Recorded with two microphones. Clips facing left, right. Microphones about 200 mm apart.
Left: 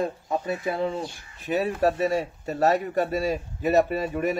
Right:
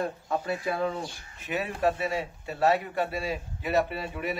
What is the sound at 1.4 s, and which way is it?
Speech, 35° left (ahead or behind).